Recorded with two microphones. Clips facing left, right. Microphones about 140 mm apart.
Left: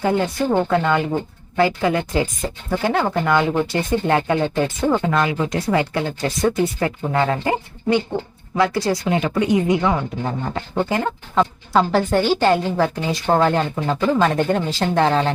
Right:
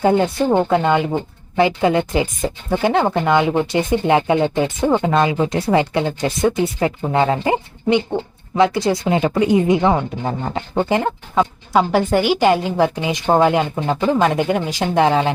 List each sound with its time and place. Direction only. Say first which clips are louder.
0.0 s speech: right 4 dB; 20° right (ahead or behind)
11.3 s a woman's voice: right 1 dB; 10° right (ahead or behind)